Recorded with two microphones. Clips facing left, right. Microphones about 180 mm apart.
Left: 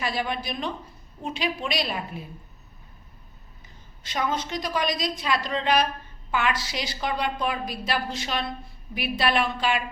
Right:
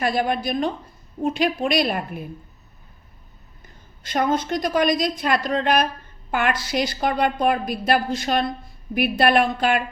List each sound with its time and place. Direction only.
0.0 s a woman's voice: 50° right (ahead or behind)
3.6 s a woman's voice: 50° right (ahead or behind)